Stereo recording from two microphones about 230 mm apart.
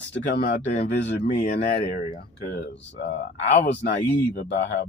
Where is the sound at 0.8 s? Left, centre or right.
Left.